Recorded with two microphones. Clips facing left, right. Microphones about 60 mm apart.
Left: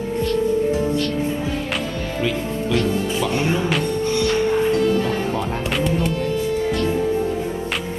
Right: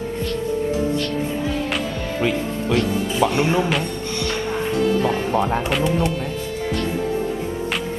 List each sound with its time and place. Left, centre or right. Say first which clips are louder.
3.2 s speech: right 6 dB; right
5.3 s speech: right 4 dB; right
5.7 s speech: left 1 dB; centre